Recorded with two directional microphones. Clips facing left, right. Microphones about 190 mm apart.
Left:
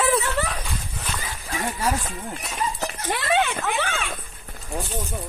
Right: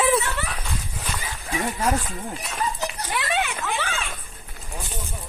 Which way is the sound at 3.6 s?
45° left (ahead or behind).